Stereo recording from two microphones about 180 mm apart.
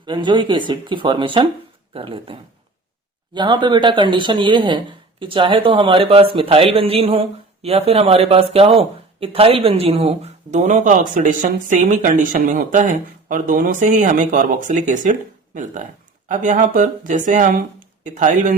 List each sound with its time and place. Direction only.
0.0 s speech: 25° right (ahead or behind); by 18.5 s 45° right (ahead or behind)